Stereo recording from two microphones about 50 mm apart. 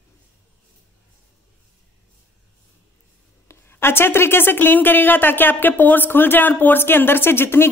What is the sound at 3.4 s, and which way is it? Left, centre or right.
Speech, left.